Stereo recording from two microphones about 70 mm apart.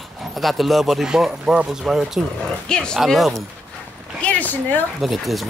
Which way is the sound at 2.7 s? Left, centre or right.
Centre.